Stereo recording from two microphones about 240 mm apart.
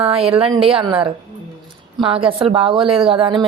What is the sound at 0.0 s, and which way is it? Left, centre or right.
A woman's voice, right.